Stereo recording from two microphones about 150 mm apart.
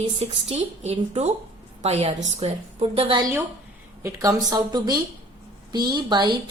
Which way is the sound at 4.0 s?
20° right (ahead or behind).